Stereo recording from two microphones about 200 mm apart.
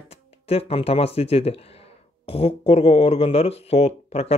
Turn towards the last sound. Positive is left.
turn(degrees=30)  # may be behind; listen again after turning